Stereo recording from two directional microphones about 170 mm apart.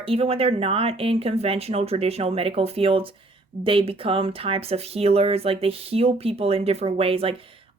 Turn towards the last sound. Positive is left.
turn(degrees=-35)  # may be behind; listen again after turning